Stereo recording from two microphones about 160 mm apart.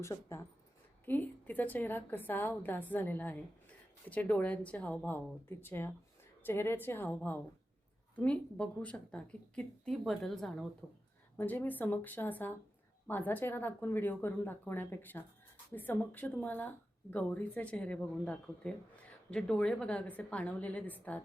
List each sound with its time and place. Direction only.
0.0 s a woman's voice: 15° left (ahead or behind)